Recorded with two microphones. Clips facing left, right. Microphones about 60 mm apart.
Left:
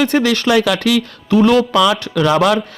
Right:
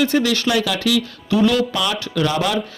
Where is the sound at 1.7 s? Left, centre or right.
Left.